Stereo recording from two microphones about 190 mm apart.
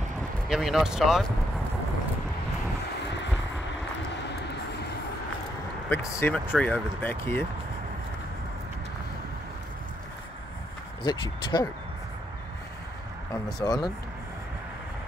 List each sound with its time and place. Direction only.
0.5 s speech: centre (ahead or behind)
5.9 s speech: 10° left (ahead or behind)
11.1 s speech: 20° left (ahead or behind)
13.6 s speech: 20° left (ahead or behind)